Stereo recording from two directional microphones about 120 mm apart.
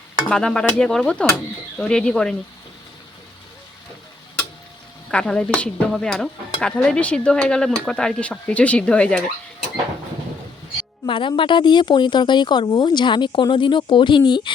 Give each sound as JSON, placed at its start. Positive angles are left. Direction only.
{"t": 0.3, "sound": "speech", "side_deg": 5}
{"t": 5.1, "sound": "speech", "side_deg": 10}
{"t": 5.9, "sound": "stir", "side_deg": 5}
{"t": 6.6, "sound": "speech", "side_deg": 5}
{"t": 11.0, "sound": "a woman's voice", "side_deg": 45}